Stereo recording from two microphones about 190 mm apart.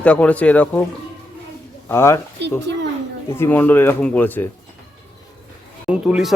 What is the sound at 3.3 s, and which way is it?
Speech, 10° left (ahead or behind).